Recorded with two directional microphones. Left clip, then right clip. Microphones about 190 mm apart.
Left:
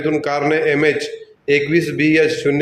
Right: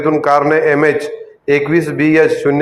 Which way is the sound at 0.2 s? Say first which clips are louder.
Right 6 dB; 15° left (ahead or behind).